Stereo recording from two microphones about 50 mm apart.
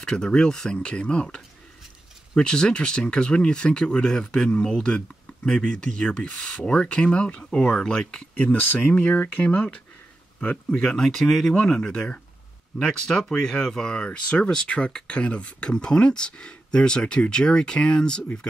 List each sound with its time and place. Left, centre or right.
0.0 s speech: centre
8.9 s speech: left
10.8 s speech: centre